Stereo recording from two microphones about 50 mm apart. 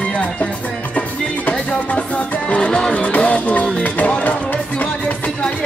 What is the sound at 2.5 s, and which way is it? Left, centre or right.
Music, left.